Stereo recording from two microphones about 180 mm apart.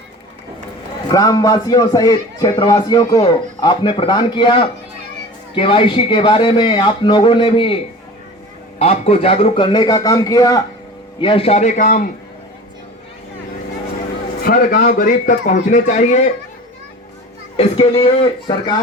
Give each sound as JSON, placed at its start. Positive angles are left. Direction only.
{"t": 1.0, "sound": "a man's voice", "side_deg": 20}
{"t": 8.8, "sound": "a man's voice", "side_deg": 35}
{"t": 11.2, "sound": "a man's voice", "side_deg": 30}
{"t": 14.4, "sound": "a man's voice", "side_deg": 55}
{"t": 18.0, "sound": "a man's voice", "side_deg": 30}